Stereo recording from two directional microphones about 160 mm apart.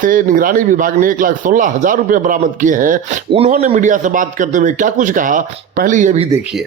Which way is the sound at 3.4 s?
45° right (ahead or behind).